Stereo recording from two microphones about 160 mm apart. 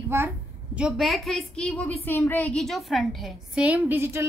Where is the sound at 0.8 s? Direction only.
Centre (ahead or behind).